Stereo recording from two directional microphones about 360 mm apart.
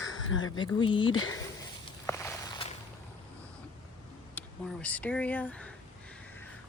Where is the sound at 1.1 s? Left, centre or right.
Left.